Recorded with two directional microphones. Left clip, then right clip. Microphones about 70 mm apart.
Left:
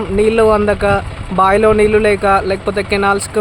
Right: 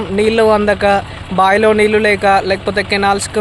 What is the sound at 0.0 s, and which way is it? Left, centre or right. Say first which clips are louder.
Speech: even; left.